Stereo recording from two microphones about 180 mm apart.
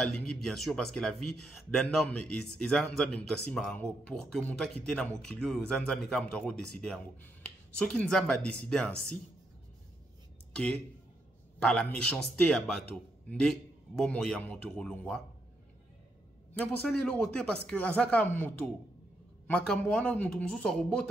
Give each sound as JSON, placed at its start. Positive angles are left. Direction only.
{"t": 0.0, "sound": "a man's voice", "side_deg": 5}
{"t": 10.5, "sound": "a man's voice", "side_deg": 5}
{"t": 16.5, "sound": "a man's voice", "side_deg": 5}